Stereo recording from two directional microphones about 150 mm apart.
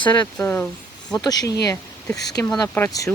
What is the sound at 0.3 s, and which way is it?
Speech, 10° left (ahead or behind).